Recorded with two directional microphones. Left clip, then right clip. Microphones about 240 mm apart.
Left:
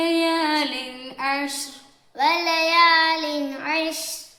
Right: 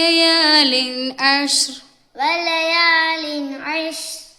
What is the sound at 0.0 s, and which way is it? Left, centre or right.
Female singing, right.